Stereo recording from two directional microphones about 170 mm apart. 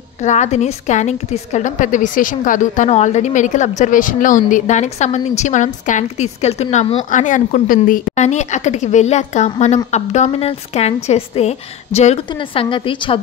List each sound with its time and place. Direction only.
0.2 s a woman's voice: 45° left (ahead or behind)
12.6 s a woman's voice: 30° left (ahead or behind)